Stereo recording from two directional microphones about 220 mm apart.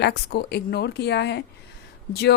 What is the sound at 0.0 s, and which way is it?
Speech, 50° left (ahead or behind).